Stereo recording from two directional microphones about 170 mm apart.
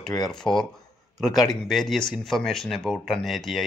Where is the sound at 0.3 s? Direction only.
5° left (ahead or behind).